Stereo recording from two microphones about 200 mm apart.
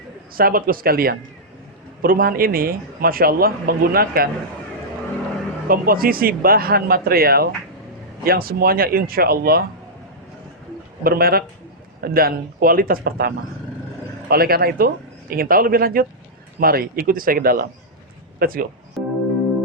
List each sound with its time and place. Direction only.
0.3 s a man's voice: 45° right (ahead or behind)
5.6 s a man's voice: 45° right (ahead or behind)
11.0 s a man's voice: 50° right (ahead or behind)
19.0 s music: centre (ahead or behind)